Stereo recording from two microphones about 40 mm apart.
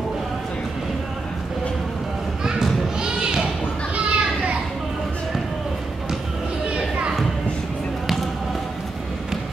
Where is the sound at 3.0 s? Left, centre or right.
Right.